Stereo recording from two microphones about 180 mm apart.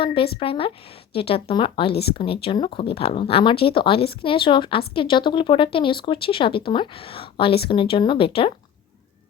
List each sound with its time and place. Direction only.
0.0 s speech: 30° left (ahead or behind)